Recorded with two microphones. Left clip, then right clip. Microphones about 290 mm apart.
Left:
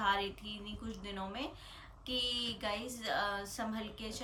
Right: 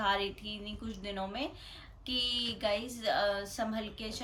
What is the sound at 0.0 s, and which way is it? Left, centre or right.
Speech, centre.